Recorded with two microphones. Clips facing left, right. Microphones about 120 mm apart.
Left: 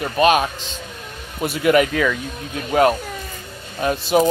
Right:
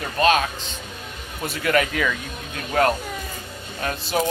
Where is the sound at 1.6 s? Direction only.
20° left (ahead or behind).